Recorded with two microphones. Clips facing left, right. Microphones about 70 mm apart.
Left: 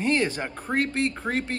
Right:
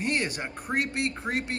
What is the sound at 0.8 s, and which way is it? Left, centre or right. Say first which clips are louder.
Speech: left 5 dB; left.